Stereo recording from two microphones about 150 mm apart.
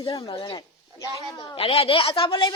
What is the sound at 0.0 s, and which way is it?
Speech, 35° left (ahead or behind).